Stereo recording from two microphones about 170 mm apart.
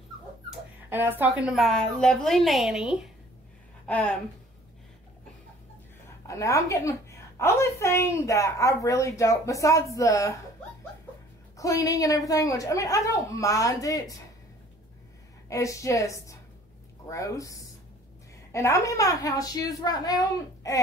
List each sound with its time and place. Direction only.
0.8 s a woman's voice: 10° right (ahead or behind); by 4.1 s 5° left (ahead or behind)
6.2 s a woman's voice: 20° left (ahead or behind)
11.5 s a woman's voice: 20° left (ahead or behind)
15.5 s a woman's voice: 20° left (ahead or behind)